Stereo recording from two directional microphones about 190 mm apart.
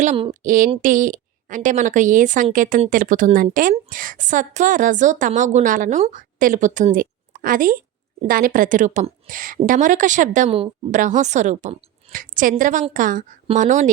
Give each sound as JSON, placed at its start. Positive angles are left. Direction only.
{"t": 0.0, "sound": "a woman's voice", "side_deg": -35}